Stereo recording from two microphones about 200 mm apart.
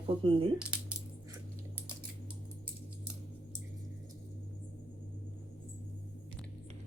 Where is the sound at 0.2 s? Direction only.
25° right (ahead or behind).